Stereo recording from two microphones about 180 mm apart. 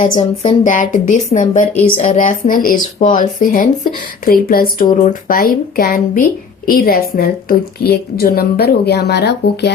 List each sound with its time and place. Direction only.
0.6 s a woman's voice: 45° left (ahead or behind); by 9.7 s 70° left (ahead or behind)